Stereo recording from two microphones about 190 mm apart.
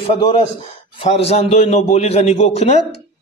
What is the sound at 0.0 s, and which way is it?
A man's voice, 25° left (ahead or behind).